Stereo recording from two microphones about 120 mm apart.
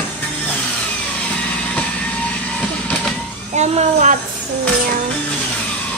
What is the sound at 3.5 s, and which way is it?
Speech, 75° right (ahead or behind).